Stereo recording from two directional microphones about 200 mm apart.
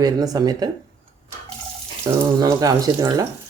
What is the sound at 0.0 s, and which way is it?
Speech, 20° right (ahead or behind).